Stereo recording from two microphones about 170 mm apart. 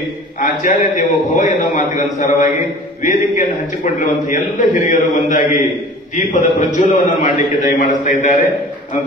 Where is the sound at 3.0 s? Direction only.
50° left (ahead or behind).